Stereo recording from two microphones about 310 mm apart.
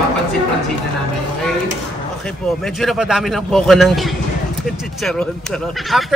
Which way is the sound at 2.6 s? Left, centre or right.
Centre.